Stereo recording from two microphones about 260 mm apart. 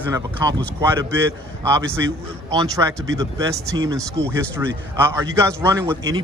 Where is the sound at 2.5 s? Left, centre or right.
Centre.